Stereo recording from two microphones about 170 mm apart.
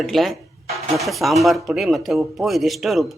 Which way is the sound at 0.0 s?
Centre (ahead or behind).